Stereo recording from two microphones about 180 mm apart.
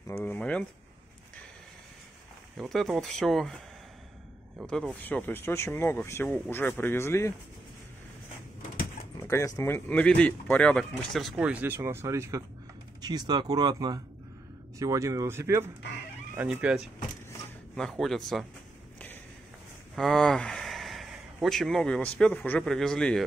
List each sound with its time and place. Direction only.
0.0 s a sound: 10° left (ahead or behind)
2.5 s speech: centre (ahead or behind)
9.6 s speech: 15° left (ahead or behind)
20.0 s speech: centre (ahead or behind)